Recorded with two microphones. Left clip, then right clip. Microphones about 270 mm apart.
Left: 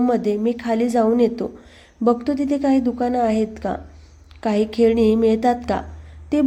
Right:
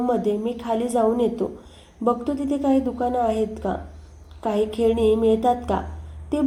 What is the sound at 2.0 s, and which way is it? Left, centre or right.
A woman's voice, left.